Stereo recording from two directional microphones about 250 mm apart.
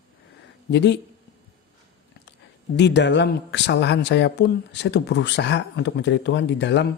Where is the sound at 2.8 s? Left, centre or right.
Left.